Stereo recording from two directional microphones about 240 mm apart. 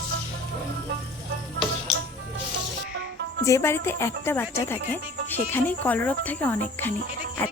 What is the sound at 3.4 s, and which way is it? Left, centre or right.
Speech, centre.